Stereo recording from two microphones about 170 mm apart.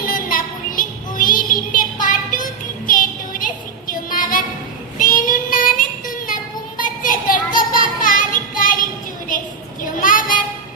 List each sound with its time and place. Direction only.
0.0 s child singing: 55° left (ahead or behind)
9.8 s child singing: 50° left (ahead or behind)